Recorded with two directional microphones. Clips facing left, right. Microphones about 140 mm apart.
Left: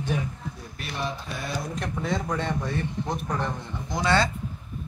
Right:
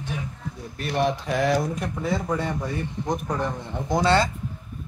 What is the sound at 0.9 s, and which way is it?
Mantra, 80° right.